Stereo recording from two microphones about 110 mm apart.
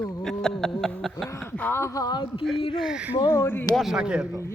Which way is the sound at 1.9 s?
40° left (ahead or behind).